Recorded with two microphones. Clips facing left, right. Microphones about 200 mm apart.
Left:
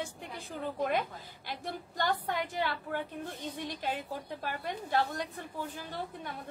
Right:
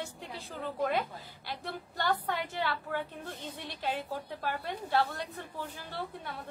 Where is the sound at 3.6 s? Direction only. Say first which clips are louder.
Even; 45° left (ahead or behind).